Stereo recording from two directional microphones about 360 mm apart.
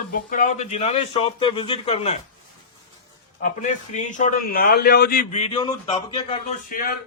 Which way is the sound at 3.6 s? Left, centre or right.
Centre.